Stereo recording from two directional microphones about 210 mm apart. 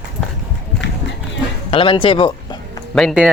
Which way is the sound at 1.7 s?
25° left (ahead or behind).